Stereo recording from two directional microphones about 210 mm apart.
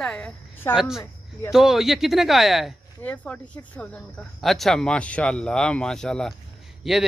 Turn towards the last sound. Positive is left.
turn(degrees=0)  # may be behind; listen again after turning